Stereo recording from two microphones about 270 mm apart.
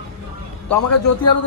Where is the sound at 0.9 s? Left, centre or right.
Left.